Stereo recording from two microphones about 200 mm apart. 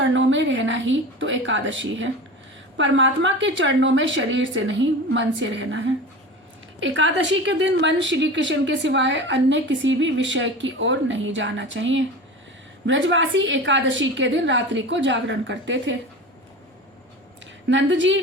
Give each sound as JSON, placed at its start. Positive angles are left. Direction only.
{"t": 0.1, "sound": "a woman's voice", "side_deg": -70}
{"t": 17.7, "sound": "a woman's voice", "side_deg": -65}